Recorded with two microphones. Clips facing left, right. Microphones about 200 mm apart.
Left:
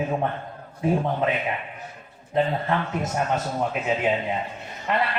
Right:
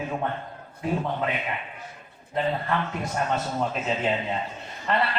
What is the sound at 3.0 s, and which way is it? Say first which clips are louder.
A woman's voice: left 2 dB; 15° left (ahead or behind).